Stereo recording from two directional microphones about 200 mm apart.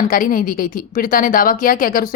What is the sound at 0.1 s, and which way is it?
A woman's voice, 45° left (ahead or behind).